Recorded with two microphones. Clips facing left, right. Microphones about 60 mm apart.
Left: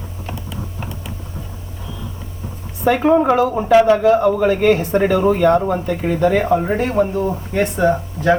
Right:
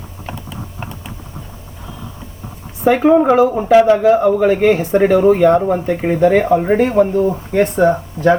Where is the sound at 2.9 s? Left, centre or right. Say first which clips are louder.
Right 3 dB; centre.